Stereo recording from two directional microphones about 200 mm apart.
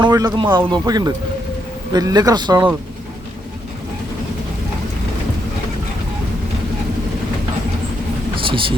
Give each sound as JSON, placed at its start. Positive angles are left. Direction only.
{"t": 0.0, "sound": "a man's voice", "side_deg": -20}
{"t": 8.4, "sound": "thunder", "side_deg": -25}